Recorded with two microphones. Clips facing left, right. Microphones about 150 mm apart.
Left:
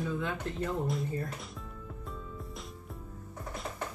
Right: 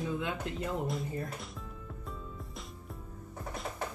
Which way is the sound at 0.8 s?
Centre (ahead or behind).